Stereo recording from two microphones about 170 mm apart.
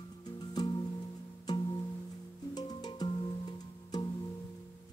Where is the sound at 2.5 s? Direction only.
25° left (ahead or behind).